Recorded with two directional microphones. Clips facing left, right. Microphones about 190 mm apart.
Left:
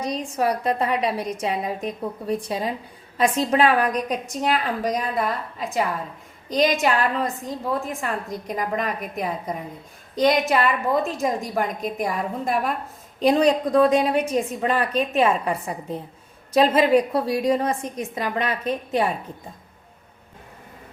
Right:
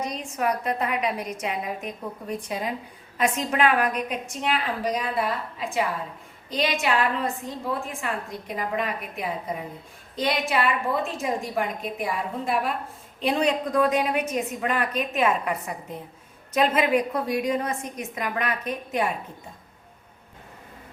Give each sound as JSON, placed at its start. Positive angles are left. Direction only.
{"t": 0.0, "sound": "a woman's voice", "side_deg": 35}